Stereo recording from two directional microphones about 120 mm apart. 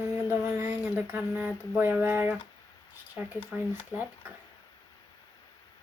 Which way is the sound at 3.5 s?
15° right (ahead or behind).